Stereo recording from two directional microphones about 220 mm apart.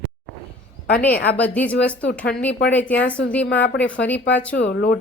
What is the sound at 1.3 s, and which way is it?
A woman's voice, 5° left (ahead or behind).